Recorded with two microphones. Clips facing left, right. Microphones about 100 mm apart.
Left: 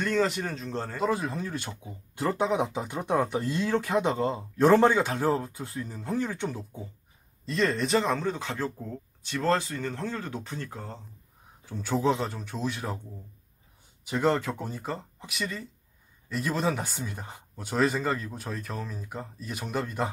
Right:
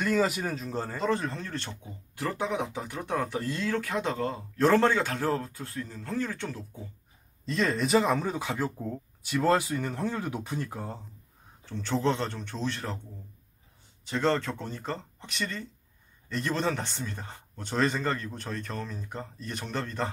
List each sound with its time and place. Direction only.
0.0 s speech: 5° right (ahead or behind)
2.1 s speech: 25° left (ahead or behind)
7.4 s speech: centre (ahead or behind)
11.6 s speech: 10° left (ahead or behind)
14.0 s speech: 10° left (ahead or behind)